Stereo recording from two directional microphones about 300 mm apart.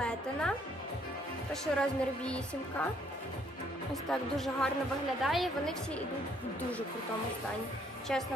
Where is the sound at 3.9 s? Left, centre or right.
Centre.